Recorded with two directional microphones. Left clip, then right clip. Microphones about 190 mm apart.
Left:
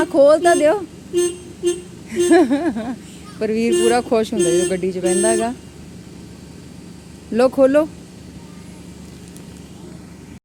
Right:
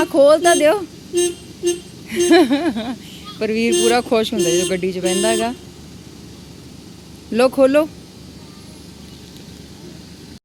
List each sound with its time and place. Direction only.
0.0 s speech: centre (ahead or behind)
2.0 s speech: centre (ahead or behind)
7.3 s speech: 5° left (ahead or behind)